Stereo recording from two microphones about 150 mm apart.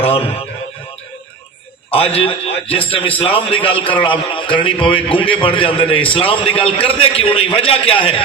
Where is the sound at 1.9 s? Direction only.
40° left (ahead or behind).